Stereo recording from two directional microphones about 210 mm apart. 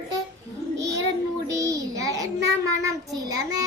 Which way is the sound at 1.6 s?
15° right (ahead or behind).